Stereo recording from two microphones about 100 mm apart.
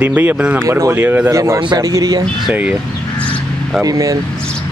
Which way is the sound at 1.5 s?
55° right (ahead or behind).